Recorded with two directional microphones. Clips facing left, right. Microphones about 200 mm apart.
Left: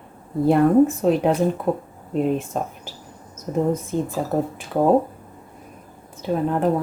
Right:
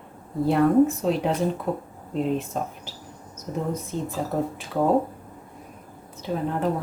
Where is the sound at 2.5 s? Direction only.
50° left (ahead or behind).